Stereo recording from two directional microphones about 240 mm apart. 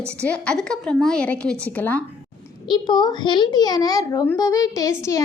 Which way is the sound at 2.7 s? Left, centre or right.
Centre.